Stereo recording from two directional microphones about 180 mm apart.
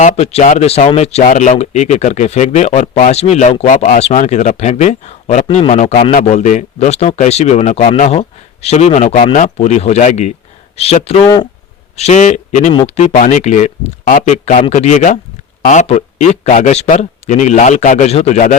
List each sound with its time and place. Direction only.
0.0 s speech: 35° left (ahead or behind)
11.2 s speech: 15° left (ahead or behind)
11.9 s speech: 40° left (ahead or behind)